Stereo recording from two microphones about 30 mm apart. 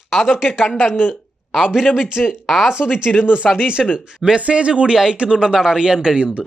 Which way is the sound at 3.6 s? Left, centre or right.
Right.